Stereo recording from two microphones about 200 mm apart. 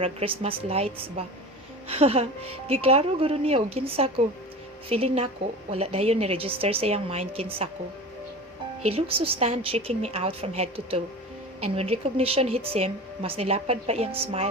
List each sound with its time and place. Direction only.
0.0 s a woman's voice: 30° right (ahead or behind)
8.9 s speech: 30° right (ahead or behind)